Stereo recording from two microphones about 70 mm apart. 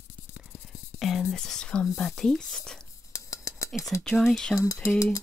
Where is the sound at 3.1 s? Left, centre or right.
Left.